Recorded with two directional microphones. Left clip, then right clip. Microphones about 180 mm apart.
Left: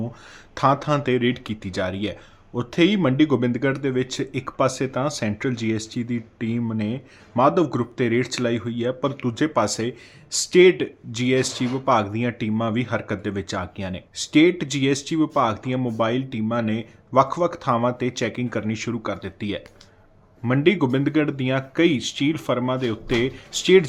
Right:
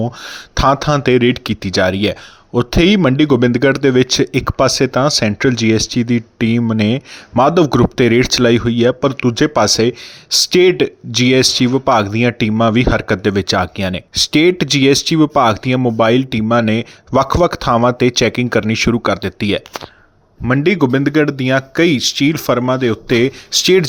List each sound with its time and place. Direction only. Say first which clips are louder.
0.2 s speech: right 3 dB; 45° right (ahead or behind)
20.4 s speech: right 6 dB; 30° right (ahead or behind)